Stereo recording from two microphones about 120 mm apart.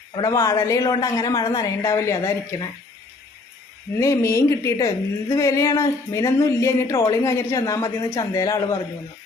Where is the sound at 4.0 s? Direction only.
25° left (ahead or behind).